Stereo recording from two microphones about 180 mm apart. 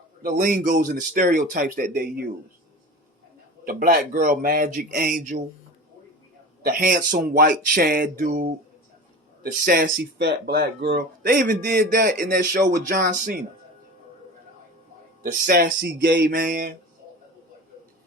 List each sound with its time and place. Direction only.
0.2 s speech: 50° right (ahead or behind)
3.6 s speech: 50° right (ahead or behind)
6.6 s speech: 55° right (ahead or behind)
15.2 s speech: 50° right (ahead or behind)